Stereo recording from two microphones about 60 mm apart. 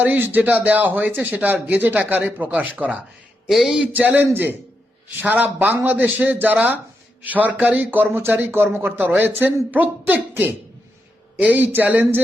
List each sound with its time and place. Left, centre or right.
0.0 s a man's voice: right
3.5 s speech: centre
3.9 s a man's voice: right